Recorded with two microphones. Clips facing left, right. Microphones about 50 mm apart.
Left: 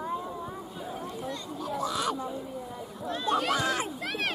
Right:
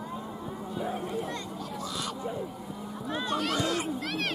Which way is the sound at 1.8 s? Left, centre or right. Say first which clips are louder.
Left 7 dB; left.